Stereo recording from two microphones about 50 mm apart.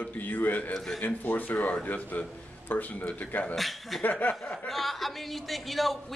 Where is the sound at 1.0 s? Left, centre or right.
Left.